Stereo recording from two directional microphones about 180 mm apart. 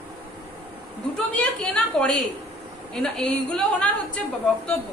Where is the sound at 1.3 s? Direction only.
5° left (ahead or behind).